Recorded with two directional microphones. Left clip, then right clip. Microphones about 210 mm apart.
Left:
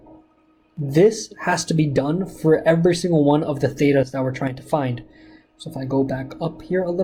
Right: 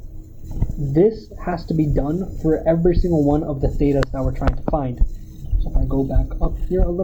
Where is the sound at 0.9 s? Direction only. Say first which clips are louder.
Left 1 dB; 40° left (ahead or behind).